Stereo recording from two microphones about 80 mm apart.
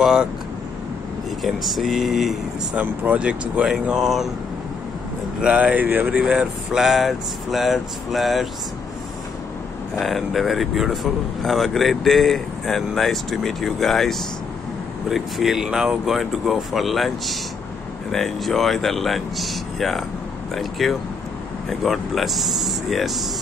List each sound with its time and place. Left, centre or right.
0.0 s speech: centre
1.4 s speech: centre
2.7 s speech: centre
5.4 s speech: centre
6.1 s speech: centre
9.9 s speech: centre